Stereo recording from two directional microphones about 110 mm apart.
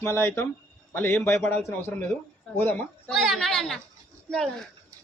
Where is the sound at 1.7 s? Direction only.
20° left (ahead or behind).